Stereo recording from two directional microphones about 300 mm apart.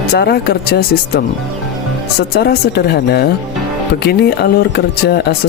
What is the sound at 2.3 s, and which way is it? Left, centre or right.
Speech, left.